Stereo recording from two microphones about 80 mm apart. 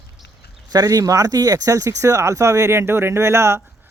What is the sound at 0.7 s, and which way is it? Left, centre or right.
Speech, right.